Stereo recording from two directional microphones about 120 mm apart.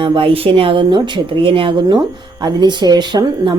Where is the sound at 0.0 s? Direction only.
45° right (ahead or behind).